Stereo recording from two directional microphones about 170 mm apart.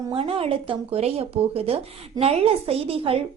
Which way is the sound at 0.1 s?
35° right (ahead or behind).